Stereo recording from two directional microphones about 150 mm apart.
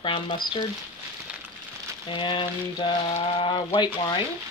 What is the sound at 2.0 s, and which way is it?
Speech, 35° left (ahead or behind).